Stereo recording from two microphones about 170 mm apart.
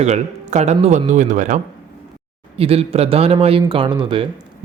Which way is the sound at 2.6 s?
35° right (ahead or behind).